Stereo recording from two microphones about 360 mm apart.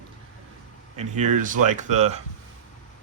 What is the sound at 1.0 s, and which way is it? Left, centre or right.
Speech, centre.